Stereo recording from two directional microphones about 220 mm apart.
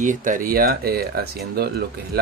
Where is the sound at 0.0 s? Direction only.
35° right (ahead or behind).